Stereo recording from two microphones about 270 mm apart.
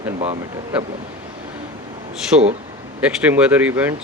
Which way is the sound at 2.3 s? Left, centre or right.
Right.